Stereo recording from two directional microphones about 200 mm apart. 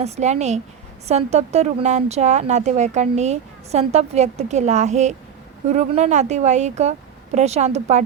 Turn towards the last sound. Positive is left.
turn(degrees=-35)  # may be behind; listen again after turning